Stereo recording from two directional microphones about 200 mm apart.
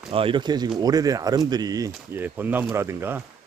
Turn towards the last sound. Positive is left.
turn(degrees=-10)  # may be behind; listen again after turning